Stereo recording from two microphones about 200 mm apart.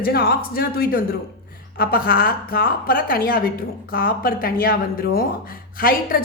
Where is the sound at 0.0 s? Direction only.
50° left (ahead or behind).